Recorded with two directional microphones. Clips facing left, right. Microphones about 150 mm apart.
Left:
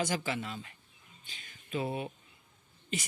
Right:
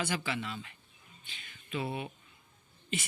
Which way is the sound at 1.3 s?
40° left (ahead or behind).